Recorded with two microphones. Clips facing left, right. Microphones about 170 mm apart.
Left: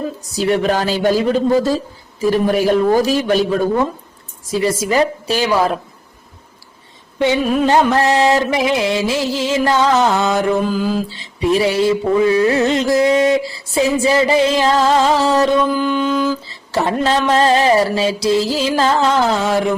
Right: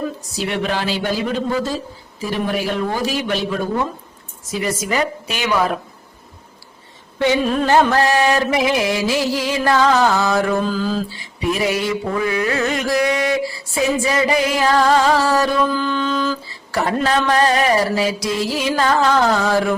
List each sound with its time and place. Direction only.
0.3 s speech: 40° left (ahead or behind)
4.6 s speech: 30° left (ahead or behind)
7.2 s mantra: 15° left (ahead or behind)
7.9 s carnatic music: 25° left (ahead or behind)
11.1 s carnatic music: 25° left (ahead or behind)
15.2 s mantra: 20° left (ahead or behind)
16.5 s carnatic music: 25° left (ahead or behind)